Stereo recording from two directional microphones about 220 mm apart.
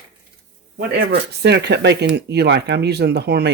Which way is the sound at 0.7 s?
50° right (ahead or behind).